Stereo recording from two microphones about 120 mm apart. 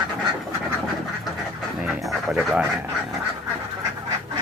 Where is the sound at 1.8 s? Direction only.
10° right (ahead or behind).